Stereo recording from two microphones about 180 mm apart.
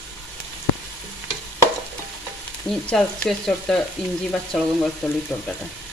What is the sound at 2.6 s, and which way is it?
Speech, centre (ahead or behind).